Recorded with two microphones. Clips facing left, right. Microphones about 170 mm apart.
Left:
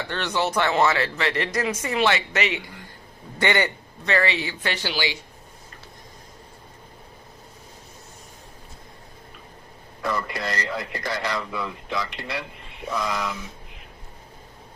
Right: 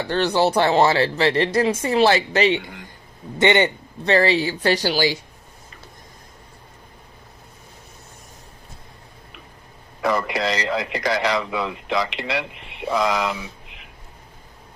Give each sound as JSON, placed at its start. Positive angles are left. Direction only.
{"t": 0.0, "sound": "a man's voice", "side_deg": -35}
{"t": 10.0, "sound": "a man's voice", "side_deg": -85}